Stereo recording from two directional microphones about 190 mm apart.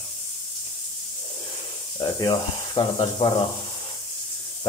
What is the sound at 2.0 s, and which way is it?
Speech, 25° left (ahead or behind).